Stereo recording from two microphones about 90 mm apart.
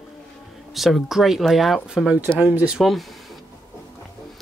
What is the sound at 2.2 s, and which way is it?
Speech, 20° right (ahead or behind).